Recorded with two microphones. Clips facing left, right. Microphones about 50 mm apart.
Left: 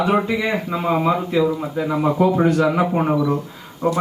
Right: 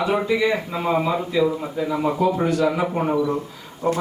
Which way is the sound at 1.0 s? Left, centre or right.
Left.